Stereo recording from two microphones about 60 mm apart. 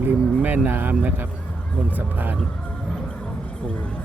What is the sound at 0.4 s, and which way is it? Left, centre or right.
Speech, right.